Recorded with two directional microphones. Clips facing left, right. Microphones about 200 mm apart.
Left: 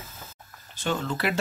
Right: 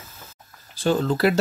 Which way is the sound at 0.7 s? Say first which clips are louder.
Right 8 dB; 35° right (ahead or behind).